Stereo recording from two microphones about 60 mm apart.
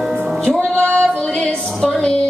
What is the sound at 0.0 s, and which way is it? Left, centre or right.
Music, right.